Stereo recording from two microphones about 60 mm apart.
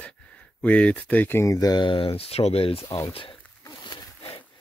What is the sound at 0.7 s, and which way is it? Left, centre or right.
Speech, left.